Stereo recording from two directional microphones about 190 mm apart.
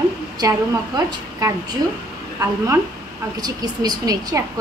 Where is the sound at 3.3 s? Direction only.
20° right (ahead or behind).